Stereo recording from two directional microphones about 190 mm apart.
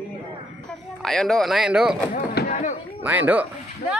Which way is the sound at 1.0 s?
Centre (ahead or behind).